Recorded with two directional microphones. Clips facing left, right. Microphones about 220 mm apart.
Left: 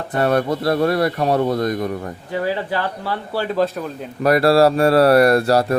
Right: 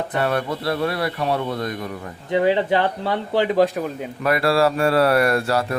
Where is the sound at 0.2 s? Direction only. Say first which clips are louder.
Left 6 dB; 40° left (ahead or behind).